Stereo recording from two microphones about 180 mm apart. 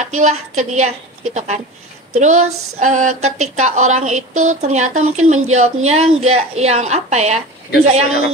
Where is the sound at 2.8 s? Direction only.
40° right (ahead or behind).